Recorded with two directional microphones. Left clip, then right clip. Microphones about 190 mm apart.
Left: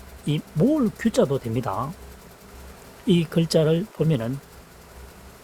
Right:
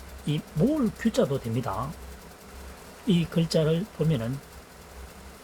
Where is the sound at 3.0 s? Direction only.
75° left (ahead or behind).